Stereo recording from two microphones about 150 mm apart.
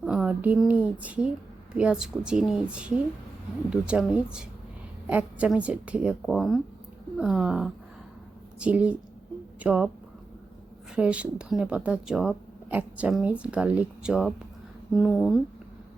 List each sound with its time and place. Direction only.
0.0 s a woman's voice: 5° right (ahead or behind)
10.9 s a woman's voice: 10° right (ahead or behind)